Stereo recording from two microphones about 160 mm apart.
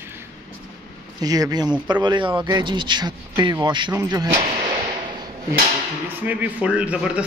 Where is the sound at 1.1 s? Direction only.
25° right (ahead or behind).